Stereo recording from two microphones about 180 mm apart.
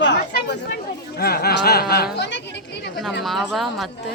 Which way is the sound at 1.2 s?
60° left (ahead or behind).